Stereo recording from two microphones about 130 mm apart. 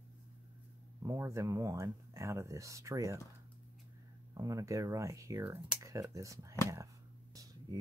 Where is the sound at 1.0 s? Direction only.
25° right (ahead or behind).